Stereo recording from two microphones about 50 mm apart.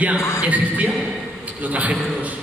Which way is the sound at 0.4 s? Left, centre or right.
Right.